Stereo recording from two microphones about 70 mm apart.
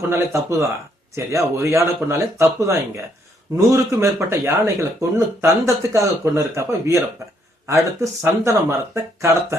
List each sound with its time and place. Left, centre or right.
0.3 s speech: right